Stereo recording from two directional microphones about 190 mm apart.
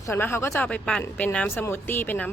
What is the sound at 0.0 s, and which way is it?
Speech, 15° left (ahead or behind).